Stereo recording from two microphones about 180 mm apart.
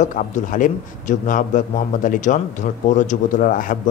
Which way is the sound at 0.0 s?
45° left (ahead or behind).